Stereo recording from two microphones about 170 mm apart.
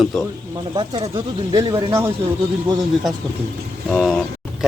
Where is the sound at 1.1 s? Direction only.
20° right (ahead or behind).